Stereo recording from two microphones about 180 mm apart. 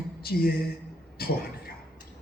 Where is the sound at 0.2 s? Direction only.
55° left (ahead or behind).